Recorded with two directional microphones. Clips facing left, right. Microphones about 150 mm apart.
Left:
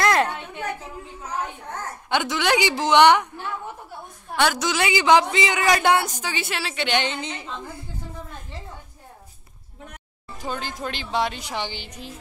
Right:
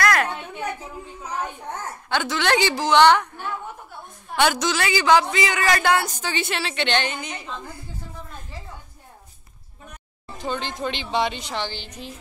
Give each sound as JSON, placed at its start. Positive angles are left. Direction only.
{"t": 0.0, "sound": "a sound", "side_deg": 25}
{"t": 2.0, "sound": "speech", "side_deg": 15}
{"t": 4.4, "sound": "a woman's voice", "side_deg": 0}
{"t": 4.6, "sound": "a man's voice", "side_deg": 20}
{"t": 6.3, "sound": "a woman's voice", "side_deg": 5}
{"t": 7.0, "sound": "a man's voice", "side_deg": 25}
{"t": 10.3, "sound": "a woman's voice", "side_deg": 5}